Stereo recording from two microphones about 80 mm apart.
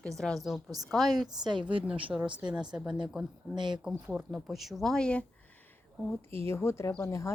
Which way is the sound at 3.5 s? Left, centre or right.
Right.